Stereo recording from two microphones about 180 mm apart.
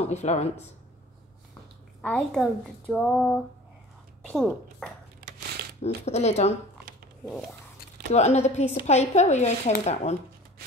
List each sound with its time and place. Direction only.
0.0 s speech: 35° left (ahead or behind)
2.0 s speech: 5° left (ahead or behind)
5.8 s speech: 35° left (ahead or behind)
8.1 s speech: 40° left (ahead or behind)